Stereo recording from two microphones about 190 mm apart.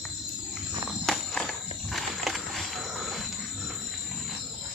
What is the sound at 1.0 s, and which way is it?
Walk, centre (ahead or behind).